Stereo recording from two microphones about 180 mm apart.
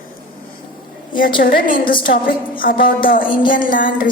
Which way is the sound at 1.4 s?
50° left (ahead or behind).